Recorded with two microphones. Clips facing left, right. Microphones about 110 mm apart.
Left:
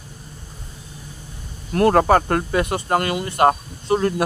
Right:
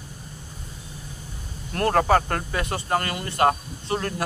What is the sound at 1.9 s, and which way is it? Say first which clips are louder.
Speech: left 4 dB; 40° left (ahead or behind).